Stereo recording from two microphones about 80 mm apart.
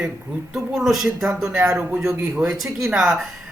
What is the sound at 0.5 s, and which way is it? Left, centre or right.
A man's voice, centre.